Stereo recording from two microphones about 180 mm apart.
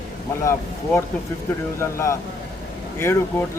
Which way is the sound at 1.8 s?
15° left (ahead or behind).